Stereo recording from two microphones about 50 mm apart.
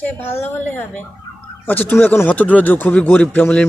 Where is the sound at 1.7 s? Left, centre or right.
Left.